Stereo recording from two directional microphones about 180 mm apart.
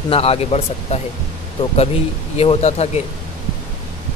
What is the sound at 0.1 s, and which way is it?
Speech, 35° left (ahead or behind).